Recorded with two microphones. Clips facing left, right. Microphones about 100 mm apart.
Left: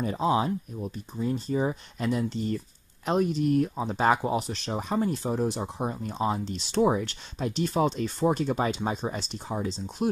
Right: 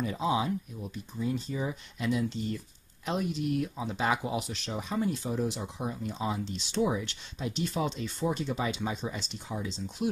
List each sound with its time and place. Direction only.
0.0 s speech: 40° left (ahead or behind)
0.5 s speech: 25° left (ahead or behind)
0.9 s speech: 40° left (ahead or behind)